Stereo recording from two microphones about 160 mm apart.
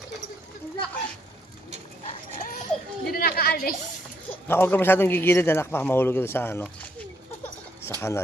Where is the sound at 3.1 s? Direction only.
70° left (ahead or behind).